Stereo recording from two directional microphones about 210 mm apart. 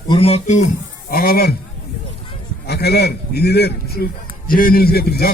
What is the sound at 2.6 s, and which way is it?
Speech, 50° left (ahead or behind).